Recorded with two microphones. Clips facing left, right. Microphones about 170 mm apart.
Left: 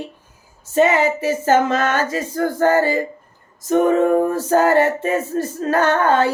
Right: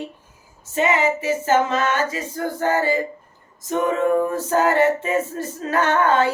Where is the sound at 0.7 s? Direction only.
35° left (ahead or behind).